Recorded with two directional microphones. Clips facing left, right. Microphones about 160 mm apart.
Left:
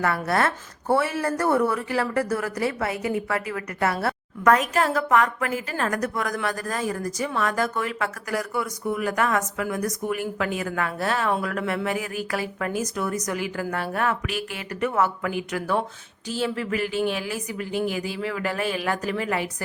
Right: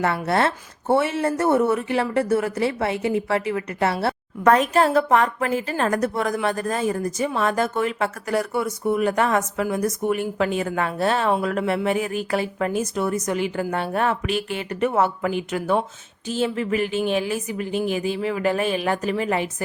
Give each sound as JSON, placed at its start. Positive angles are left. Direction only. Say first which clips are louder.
{"t": 0.0, "sound": "a woman's voice", "louder": "right 2 dB", "side_deg": -25}